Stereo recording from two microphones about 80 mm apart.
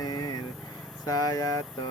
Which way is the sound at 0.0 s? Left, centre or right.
Left.